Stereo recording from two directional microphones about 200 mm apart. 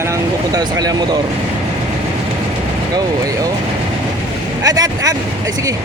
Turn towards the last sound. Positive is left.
turn(degrees=-20)  # may be behind; listen again after turning